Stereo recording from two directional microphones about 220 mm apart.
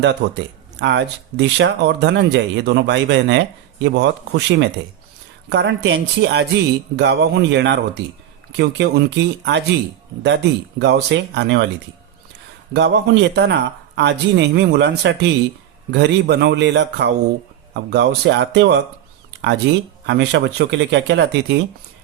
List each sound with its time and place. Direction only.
0.0 s speech: 50° right (ahead or behind)
12.7 s speech: 50° right (ahead or behind)
20.1 s speech: 50° right (ahead or behind)